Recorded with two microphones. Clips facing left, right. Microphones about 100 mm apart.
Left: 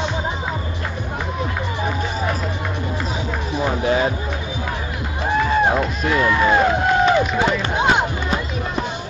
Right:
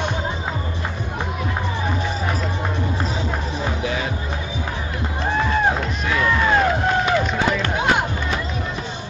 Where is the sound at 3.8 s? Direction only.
35° left (ahead or behind).